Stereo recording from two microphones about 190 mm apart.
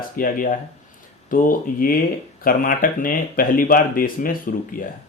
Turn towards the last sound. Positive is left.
turn(degrees=45)  # may be behind; listen again after turning